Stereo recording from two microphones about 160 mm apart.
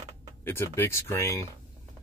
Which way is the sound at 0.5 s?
15° left (ahead or behind).